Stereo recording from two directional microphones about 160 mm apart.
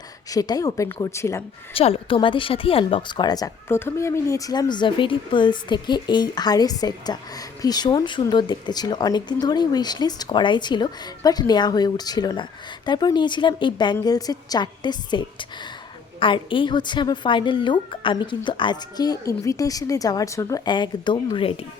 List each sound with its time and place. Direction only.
0.3 s speech: 25° left (ahead or behind)
1.7 s speech: 35° left (ahead or behind)